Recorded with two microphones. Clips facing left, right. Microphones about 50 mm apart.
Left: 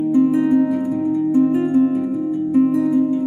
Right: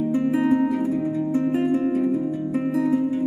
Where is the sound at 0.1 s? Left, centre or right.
Centre.